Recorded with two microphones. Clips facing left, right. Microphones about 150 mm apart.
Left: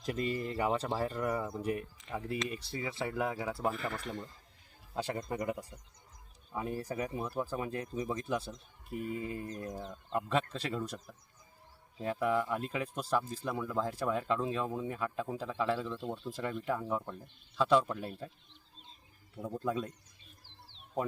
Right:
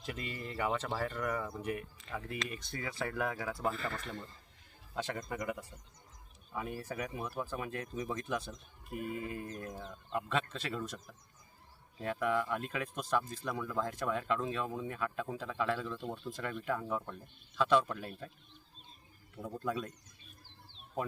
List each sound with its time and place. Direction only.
0.0 s speech: 40° left (ahead or behind)
1.4 s speech: 20° left (ahead or behind)
4.9 s speech: 35° left (ahead or behind)
11.9 s speech: 25° left (ahead or behind)
17.5 s speech: 35° left (ahead or behind)
19.4 s speech: 15° left (ahead or behind)
19.6 s speech: 30° left (ahead or behind)